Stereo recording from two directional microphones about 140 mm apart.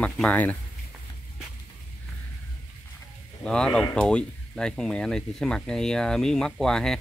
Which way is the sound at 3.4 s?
5° left (ahead or behind).